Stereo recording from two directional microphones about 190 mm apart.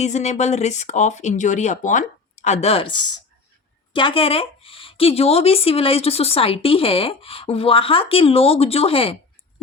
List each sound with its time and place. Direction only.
0.0 s speech: 35° left (ahead or behind)